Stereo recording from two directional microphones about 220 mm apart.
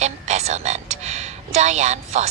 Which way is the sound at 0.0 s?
30° right (ahead or behind).